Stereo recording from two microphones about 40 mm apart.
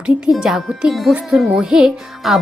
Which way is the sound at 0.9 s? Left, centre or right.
Centre.